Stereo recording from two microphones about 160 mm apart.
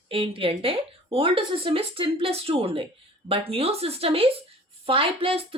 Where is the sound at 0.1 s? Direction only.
35° right (ahead or behind).